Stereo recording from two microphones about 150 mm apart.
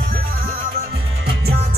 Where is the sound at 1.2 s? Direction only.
90° right.